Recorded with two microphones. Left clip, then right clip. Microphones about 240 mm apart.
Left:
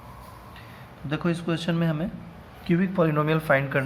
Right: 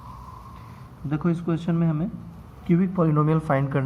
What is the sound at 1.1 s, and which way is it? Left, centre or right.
Speech, left.